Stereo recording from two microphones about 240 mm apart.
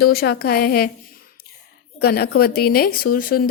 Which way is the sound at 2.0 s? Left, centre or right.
Left.